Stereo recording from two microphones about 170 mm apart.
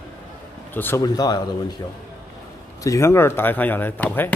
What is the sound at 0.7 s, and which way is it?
Speech, 10° left (ahead or behind).